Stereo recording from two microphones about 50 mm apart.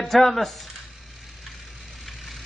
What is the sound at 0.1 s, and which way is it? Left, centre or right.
Speech, centre.